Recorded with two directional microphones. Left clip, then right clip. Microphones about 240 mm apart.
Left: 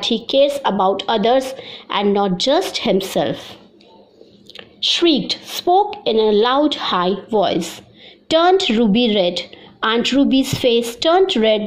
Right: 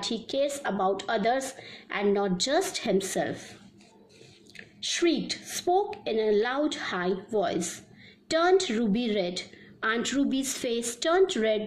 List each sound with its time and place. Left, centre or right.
0.0 s a woman's voice: centre
4.6 s a woman's voice: centre